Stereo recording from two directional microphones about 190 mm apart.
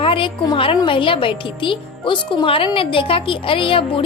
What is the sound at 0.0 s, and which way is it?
A woman's voice, 30° left (ahead or behind).